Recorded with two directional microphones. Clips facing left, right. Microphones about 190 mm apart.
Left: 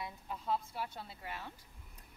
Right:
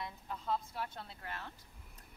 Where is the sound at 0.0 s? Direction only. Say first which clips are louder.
Even; 5° left (ahead or behind).